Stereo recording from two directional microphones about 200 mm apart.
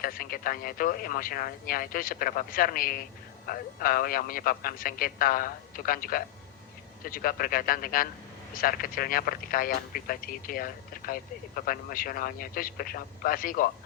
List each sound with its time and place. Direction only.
0.0 s speech: 45° left (ahead or behind)